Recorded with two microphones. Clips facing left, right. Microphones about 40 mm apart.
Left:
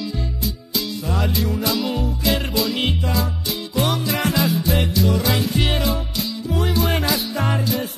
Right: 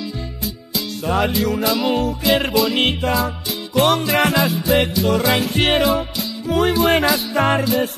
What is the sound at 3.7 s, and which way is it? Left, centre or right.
Music, right.